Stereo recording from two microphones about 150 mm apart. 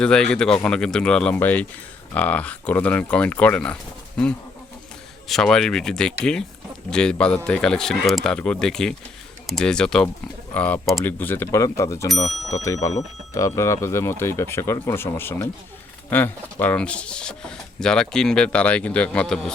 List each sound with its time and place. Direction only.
0.0 s speech: 5° left (ahead or behind)
5.3 s speech: 5° left (ahead or behind)